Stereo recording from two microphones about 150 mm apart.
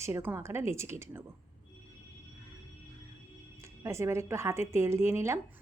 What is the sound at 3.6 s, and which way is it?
Speech, 20° right (ahead or behind).